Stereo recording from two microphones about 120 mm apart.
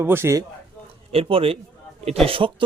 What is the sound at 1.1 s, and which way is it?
Speech, 50° right (ahead or behind).